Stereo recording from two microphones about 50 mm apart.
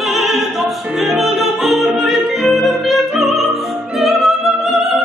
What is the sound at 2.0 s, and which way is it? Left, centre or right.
Music, centre.